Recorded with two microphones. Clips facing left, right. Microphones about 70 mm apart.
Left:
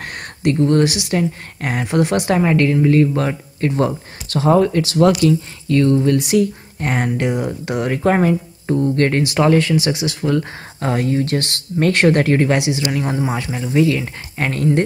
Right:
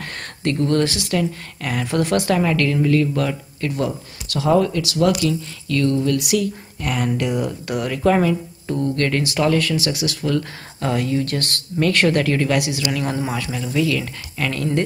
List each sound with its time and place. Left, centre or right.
0.0 s speech: left
7.9 s speech: left
8.7 s speech: centre
9.0 s speech: left